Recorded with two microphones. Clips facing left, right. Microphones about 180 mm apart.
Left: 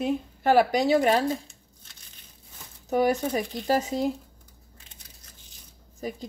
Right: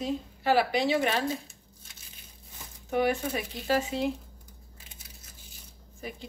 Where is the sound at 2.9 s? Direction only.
40° left (ahead or behind).